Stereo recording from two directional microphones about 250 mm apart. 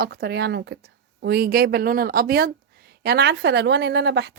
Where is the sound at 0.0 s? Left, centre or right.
Right.